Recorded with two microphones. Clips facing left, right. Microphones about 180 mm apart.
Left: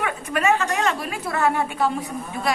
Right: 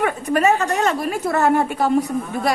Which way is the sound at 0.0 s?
40° right (ahead or behind).